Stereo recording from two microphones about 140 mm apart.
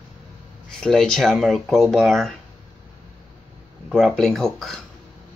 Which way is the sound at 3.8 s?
Centre (ahead or behind).